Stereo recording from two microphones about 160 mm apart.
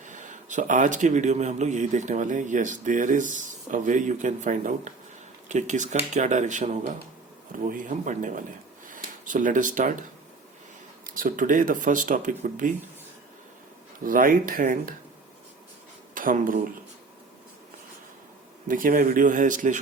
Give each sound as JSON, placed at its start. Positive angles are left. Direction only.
{"t": 0.0, "sound": "speech", "side_deg": -50}
{"t": 11.0, "sound": "speech", "side_deg": -60}
{"t": 14.0, "sound": "speech", "side_deg": -60}
{"t": 16.1, "sound": "speech", "side_deg": -60}
{"t": 18.7, "sound": "speech", "side_deg": -60}